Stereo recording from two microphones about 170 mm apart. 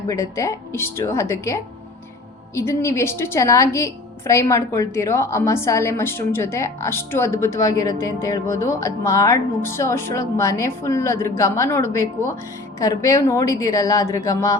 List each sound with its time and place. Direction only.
0.1 s a woman's voice: 20° left (ahead or behind)
2.6 s a woman's voice: 15° left (ahead or behind)